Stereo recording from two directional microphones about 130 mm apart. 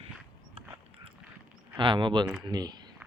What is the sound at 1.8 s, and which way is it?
Speech, 40° right (ahead or behind).